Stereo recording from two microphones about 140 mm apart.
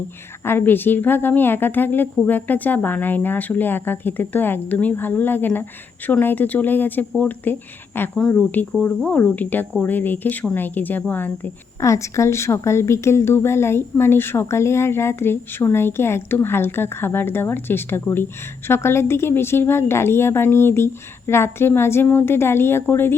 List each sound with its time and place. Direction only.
0.4 s speech: 15° left (ahead or behind)